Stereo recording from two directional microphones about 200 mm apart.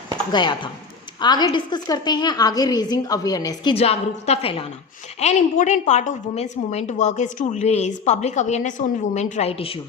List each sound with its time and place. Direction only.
0.3 s a woman's voice: 20° left (ahead or behind)